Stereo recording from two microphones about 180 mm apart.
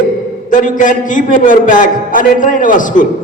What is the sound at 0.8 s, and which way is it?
A man's voice, 45° left (ahead or behind).